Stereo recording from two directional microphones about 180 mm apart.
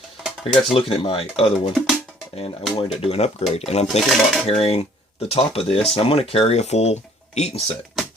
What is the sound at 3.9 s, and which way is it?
Speech, centre (ahead or behind).